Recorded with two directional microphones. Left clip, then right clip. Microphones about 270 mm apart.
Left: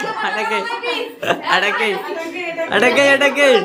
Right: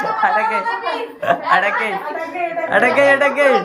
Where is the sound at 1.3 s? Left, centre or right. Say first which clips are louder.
Right 1 dB; centre.